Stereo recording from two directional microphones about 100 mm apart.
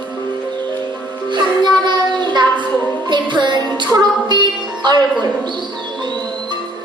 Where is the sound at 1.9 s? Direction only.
45° right (ahead or behind).